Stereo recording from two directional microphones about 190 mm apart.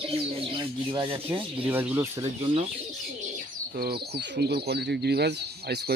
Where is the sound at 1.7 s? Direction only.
10° right (ahead or behind).